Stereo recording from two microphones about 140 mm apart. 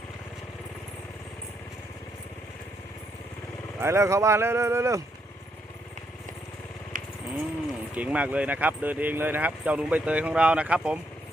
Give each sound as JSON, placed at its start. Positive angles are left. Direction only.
{"t": 3.8, "sound": "speech", "side_deg": -20}
{"t": 6.9, "sound": "a sound", "side_deg": -75}
{"t": 7.9, "sound": "speech", "side_deg": -10}